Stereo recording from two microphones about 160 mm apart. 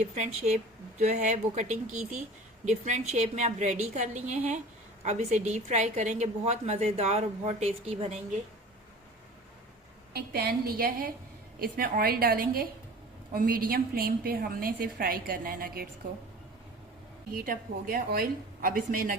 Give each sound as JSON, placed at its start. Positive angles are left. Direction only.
{"t": 0.1, "sound": "a woman's voice", "side_deg": -45}
{"t": 10.1, "sound": "a woman's voice", "side_deg": -80}
{"t": 17.3, "sound": "a woman's voice", "side_deg": -65}